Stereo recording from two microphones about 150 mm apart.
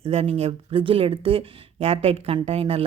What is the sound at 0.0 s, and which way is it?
Speech, 40° right (ahead or behind).